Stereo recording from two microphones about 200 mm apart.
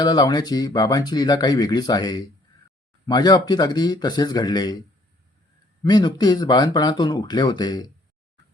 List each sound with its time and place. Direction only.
0.0 s speech: 20° left (ahead or behind)
5.8 s speech: 20° left (ahead or behind)